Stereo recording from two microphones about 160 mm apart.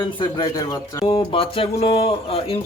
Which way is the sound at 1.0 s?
35° left (ahead or behind).